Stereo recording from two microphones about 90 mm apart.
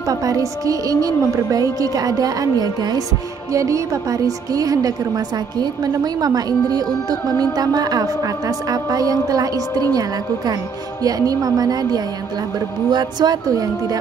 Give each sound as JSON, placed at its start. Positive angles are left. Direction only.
{"t": 0.1, "sound": "speech", "side_deg": -40}
{"t": 3.5, "sound": "speech", "side_deg": -35}
{"t": 11.1, "sound": "speech", "side_deg": -45}